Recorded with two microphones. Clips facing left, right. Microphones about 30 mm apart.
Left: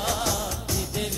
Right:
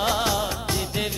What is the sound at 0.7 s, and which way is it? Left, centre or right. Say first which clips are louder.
Music: right 3 dB; right.